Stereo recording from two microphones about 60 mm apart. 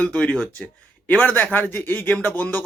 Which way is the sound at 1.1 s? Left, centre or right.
Left.